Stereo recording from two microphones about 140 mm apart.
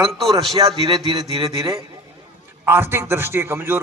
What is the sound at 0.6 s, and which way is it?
A man's voice, 25° right (ahead or behind).